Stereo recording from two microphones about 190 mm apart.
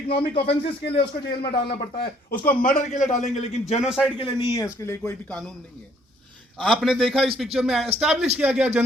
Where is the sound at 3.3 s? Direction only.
35° left (ahead or behind).